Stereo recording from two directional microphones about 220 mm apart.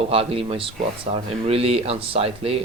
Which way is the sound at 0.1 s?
25° right (ahead or behind).